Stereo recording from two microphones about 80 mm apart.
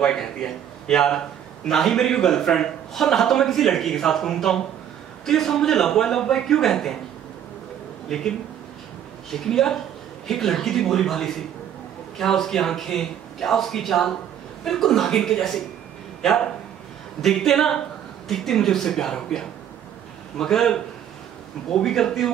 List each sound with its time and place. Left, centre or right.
0.0 s a man's voice: centre
8.1 s a man's voice: centre
9.3 s a man's voice: centre
17.2 s a man's voice: centre